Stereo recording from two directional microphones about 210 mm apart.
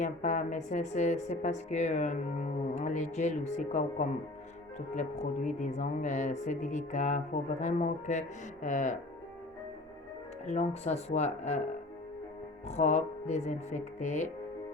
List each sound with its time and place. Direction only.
0.0 s a woman's voice: 35° left (ahead or behind)
10.4 s a woman's voice: 30° left (ahead or behind)
12.6 s a woman's voice: 35° left (ahead or behind)